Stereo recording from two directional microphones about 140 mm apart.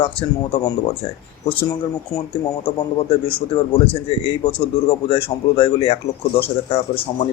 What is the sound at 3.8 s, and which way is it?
A man's voice, 45° left (ahead or behind).